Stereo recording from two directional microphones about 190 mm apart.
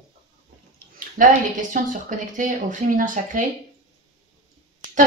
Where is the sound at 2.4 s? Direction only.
45° right (ahead or behind).